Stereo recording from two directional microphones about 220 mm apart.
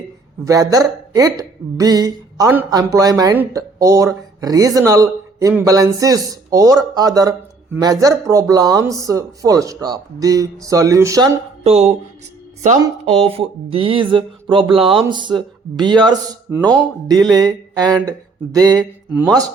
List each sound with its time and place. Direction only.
0.4 s speech: 15° right (ahead or behind)
11.6 s speech: 30° right (ahead or behind)
17.3 s a sound: 15° right (ahead or behind)
18.5 s speech: 15° right (ahead or behind)